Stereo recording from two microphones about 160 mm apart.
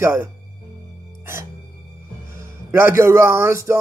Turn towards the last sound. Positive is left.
turn(degrees=-15)  # may be behind; listen again after turning